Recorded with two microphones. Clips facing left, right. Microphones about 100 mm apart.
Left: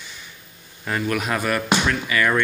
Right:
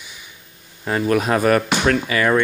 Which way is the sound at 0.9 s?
35° right (ahead or behind).